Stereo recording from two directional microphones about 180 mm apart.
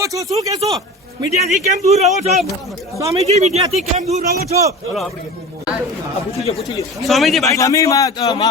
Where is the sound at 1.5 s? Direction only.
40° right (ahead or behind).